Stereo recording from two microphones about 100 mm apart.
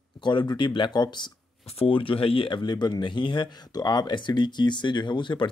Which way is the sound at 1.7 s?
65° left (ahead or behind).